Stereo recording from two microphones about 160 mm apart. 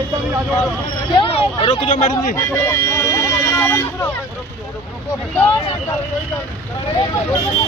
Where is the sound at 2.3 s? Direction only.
15° left (ahead or behind).